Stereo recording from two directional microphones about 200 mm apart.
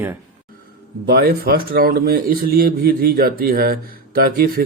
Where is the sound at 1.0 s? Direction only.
50° right (ahead or behind).